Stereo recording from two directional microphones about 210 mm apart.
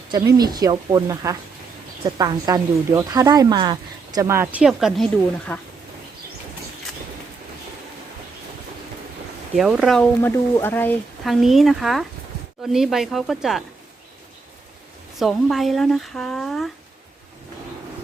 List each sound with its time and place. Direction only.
0.1 s a woman's voice: 20° right (ahead or behind); by 5.0 s centre (ahead or behind)
5.5 s speech: 10° left (ahead or behind)
9.6 s speech: centre (ahead or behind)
15.2 s speech: centre (ahead or behind)